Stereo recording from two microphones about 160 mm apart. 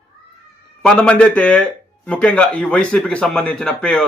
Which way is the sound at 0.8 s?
5° left (ahead or behind).